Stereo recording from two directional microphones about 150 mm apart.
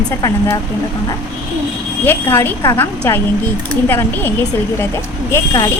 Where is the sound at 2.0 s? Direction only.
15° left (ahead or behind).